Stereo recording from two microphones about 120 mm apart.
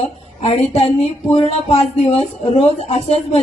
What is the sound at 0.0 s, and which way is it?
Speech, 60° left (ahead or behind).